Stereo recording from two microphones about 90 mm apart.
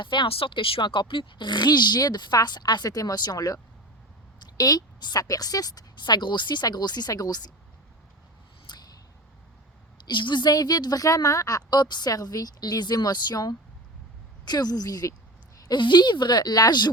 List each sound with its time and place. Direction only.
0.0 s speech: 65° left (ahead or behind); by 3.6 s 45° left (ahead or behind)
4.4 s a sound: 45° left (ahead or behind)
5.2 s a woman's voice: 45° left (ahead or behind)
8.7 s a sound: 55° left (ahead or behind)
10.1 s a woman's voice: 60° left (ahead or behind); by 15.1 s 45° left (ahead or behind)
15.7 s a woman's voice: 55° left (ahead or behind)